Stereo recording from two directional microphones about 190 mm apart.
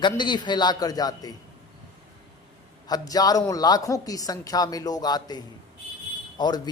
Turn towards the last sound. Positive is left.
turn(degrees=20)  # may be behind; listen again after turning